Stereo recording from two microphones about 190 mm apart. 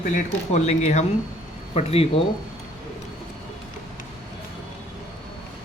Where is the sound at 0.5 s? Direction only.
35° left (ahead or behind).